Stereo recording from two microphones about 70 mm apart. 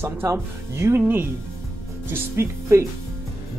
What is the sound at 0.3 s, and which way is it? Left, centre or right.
Speech, right.